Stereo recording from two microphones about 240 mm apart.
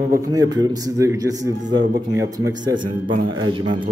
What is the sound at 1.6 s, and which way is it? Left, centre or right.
Speech, right.